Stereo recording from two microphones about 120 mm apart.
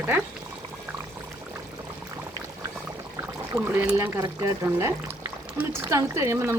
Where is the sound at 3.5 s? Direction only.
15° right (ahead or behind).